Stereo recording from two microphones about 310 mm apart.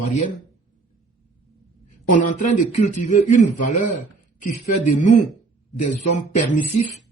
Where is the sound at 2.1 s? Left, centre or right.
Left.